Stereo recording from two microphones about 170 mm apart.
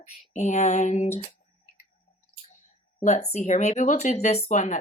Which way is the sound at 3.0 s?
40° left (ahead or behind).